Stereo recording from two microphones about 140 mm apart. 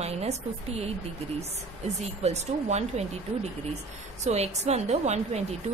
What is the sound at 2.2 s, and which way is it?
Speech, 50° right (ahead or behind).